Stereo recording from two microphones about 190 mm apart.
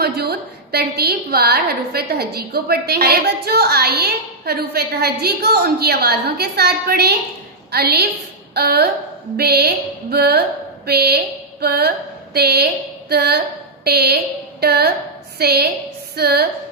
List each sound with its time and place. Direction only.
0.0 s a woman's voice: 55° right (ahead or behind)